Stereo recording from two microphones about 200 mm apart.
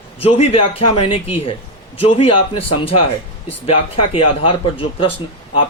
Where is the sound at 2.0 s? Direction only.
30° left (ahead or behind).